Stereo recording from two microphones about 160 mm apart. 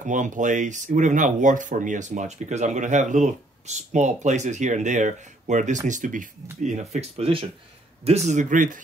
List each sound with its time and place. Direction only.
0.0 s speech: 50° right (ahead or behind)